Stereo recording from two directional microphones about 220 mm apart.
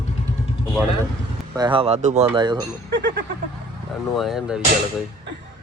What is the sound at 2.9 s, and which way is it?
Speech, 50° right (ahead or behind).